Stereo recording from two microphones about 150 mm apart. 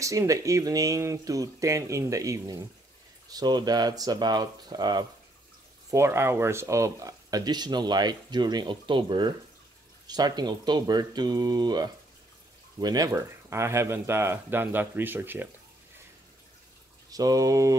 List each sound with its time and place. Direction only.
0.0 s speech: 20° right (ahead or behind)
5.9 s speech: 15° right (ahead or behind)
17.1 s speech: 25° right (ahead or behind)